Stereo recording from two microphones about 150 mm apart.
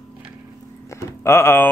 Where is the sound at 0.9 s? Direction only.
20° left (ahead or behind).